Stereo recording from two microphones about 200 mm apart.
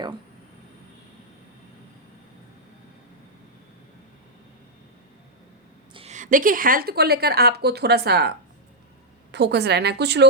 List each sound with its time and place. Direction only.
5.9 s a woman's voice: 30° right (ahead or behind); by 8.3 s 55° right (ahead or behind)
9.3 s a woman's voice: 55° right (ahead or behind)